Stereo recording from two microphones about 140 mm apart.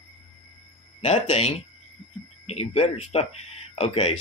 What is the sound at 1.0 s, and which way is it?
Speech, 50° left (ahead or behind).